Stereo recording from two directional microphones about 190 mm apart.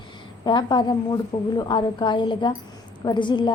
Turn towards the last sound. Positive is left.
turn(degrees=25)  # may be behind; listen again after turning